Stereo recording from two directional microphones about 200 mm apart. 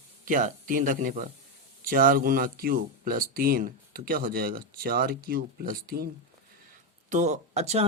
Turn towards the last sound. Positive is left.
turn(degrees=-30)  # may be behind; listen again after turning